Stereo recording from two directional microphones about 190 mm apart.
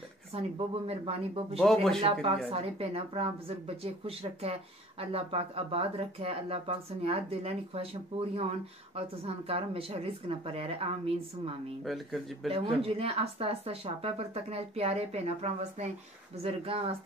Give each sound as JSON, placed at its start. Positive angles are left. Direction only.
{"t": 0.3, "sound": "speech", "side_deg": -30}
{"t": 1.6, "sound": "speech", "side_deg": 0}
{"t": 2.0, "sound": "speech", "side_deg": -30}
{"t": 11.8, "sound": "speech", "side_deg": 0}
{"t": 12.4, "sound": "speech", "side_deg": -30}